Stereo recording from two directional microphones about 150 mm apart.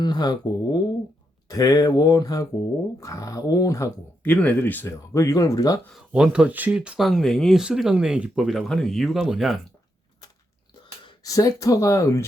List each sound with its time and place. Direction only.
0.0 s speech: 25° left (ahead or behind)
5.9 s speech: centre (ahead or behind)
11.0 s speech: 25° left (ahead or behind)